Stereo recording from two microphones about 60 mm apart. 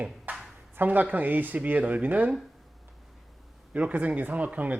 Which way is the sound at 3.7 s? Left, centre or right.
Right.